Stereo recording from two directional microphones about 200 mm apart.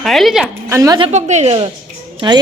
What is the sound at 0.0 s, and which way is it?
Speech, centre (ahead or behind).